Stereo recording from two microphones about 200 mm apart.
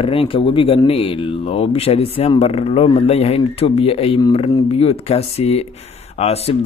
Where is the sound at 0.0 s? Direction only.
25° left (ahead or behind).